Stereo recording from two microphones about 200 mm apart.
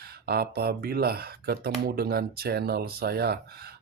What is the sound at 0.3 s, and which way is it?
Speech, 50° right (ahead or behind).